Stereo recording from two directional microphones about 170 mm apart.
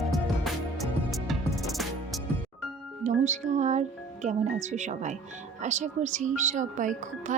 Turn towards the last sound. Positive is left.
turn(degrees=-50)  # may be behind; listen again after turning